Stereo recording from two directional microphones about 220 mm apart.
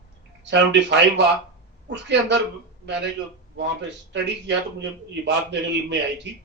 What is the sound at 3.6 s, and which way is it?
Speech, 55° right (ahead or behind).